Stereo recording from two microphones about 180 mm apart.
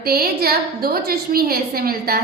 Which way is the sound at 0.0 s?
55° right (ahead or behind).